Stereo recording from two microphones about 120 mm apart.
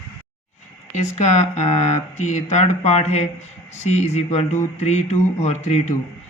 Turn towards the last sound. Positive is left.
turn(degrees=70)  # may be behind; listen again after turning